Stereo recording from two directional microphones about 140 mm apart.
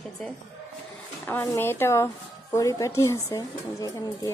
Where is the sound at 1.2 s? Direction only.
15° left (ahead or behind).